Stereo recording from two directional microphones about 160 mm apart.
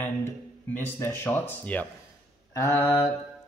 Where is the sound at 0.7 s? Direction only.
15° left (ahead or behind).